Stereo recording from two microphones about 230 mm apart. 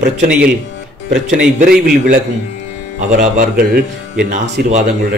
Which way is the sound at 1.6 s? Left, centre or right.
Right.